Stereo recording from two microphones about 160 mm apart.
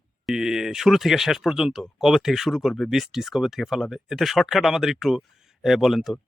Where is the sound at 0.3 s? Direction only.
5° right (ahead or behind).